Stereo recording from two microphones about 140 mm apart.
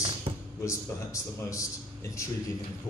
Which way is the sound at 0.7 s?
25° left (ahead or behind).